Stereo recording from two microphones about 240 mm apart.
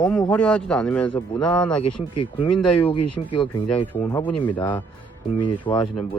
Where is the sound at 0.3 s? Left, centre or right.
Centre.